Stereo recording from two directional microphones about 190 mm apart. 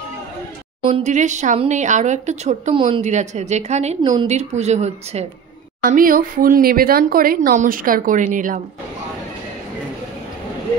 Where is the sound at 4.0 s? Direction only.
25° right (ahead or behind).